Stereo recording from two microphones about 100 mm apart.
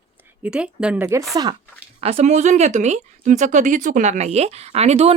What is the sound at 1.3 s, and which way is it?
Speech, 40° right (ahead or behind).